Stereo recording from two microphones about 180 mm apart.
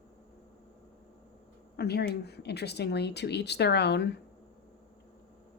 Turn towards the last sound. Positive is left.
turn(degrees=70)  # may be behind; listen again after turning